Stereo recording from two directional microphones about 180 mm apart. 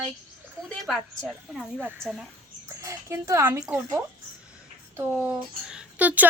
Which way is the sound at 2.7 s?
15° right (ahead or behind).